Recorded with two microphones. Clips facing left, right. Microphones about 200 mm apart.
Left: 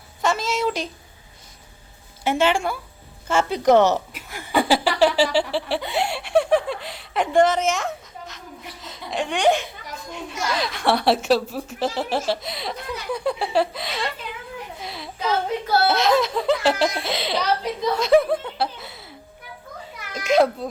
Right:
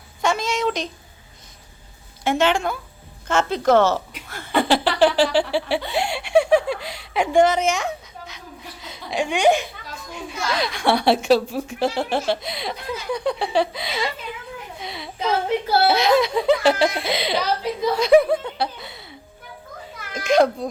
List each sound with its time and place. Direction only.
0.2 s a woman's voice: centre (ahead or behind)
2.2 s speech: 10° left (ahead or behind)
4.1 s chuckle: 10° left (ahead or behind)
5.9 s a woman's voice: 5° left (ahead or behind)
14.8 s a sound: centre (ahead or behind)
15.9 s a woman's voice: centre (ahead or behind)
20.1 s a woman's voice: 5° left (ahead or behind)